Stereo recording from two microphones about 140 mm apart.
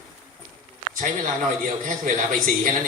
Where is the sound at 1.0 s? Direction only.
70° right (ahead or behind).